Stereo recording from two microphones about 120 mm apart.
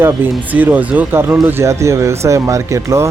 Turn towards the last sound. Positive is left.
turn(degrees=-25)  # may be behind; listen again after turning